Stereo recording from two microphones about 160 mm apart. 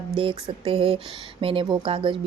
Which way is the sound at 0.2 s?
35° right (ahead or behind).